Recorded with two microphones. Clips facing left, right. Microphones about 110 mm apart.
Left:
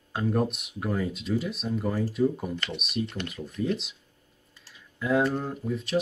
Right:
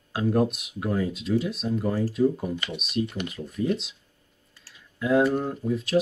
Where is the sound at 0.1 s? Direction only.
Centre (ahead or behind).